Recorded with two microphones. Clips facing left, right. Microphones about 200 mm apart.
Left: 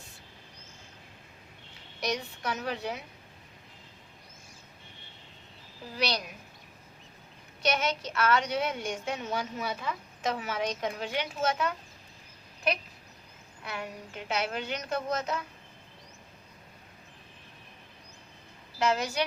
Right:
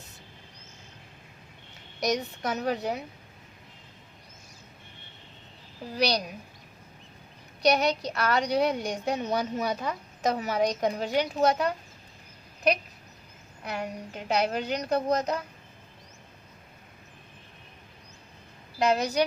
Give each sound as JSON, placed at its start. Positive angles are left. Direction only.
{"t": 2.0, "sound": "a woman's voice", "side_deg": -40}
{"t": 6.0, "sound": "a woman's voice", "side_deg": -40}
{"t": 7.6, "sound": "a woman's voice", "side_deg": -40}
{"t": 13.7, "sound": "a woman's voice", "side_deg": -40}
{"t": 18.8, "sound": "a woman's voice", "side_deg": -35}